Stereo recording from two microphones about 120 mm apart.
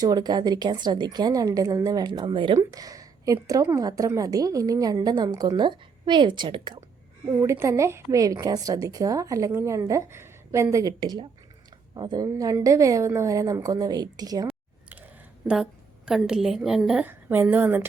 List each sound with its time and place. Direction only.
0.0 s a woman's voice: 35° right (ahead or behind)
2.6 s a woman's voice: 30° right (ahead or behind)
7.3 s a woman's voice: 25° right (ahead or behind)
14.4 s a sound: 10° right (ahead or behind)
15.4 s a woman's voice: 5° right (ahead or behind)
17.1 s a woman's voice: 15° right (ahead or behind)